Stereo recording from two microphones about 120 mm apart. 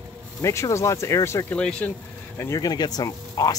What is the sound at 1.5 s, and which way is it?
Speech, 10° left (ahead or behind).